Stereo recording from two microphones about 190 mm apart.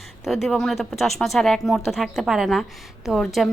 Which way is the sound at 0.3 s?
Centre (ahead or behind).